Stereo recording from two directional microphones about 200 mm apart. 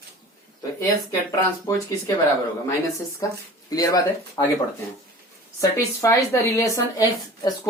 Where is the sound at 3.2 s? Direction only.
15° left (ahead or behind).